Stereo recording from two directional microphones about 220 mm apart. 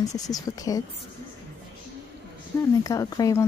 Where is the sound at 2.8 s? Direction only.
15° left (ahead or behind).